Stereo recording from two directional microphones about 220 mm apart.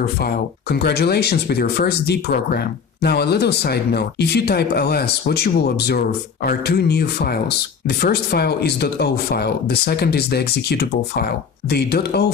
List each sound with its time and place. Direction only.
0.0 s speech: 45° left (ahead or behind)